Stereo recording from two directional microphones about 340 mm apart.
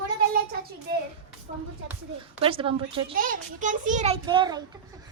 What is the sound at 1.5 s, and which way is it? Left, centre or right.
A child's voice, right.